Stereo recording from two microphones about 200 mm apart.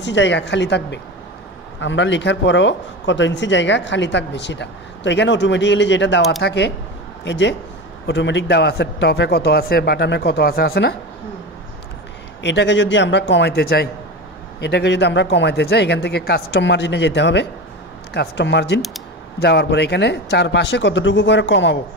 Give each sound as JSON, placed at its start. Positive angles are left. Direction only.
{"t": 0.0, "sound": "speech", "side_deg": 65}
{"t": 12.4, "sound": "speech", "side_deg": 60}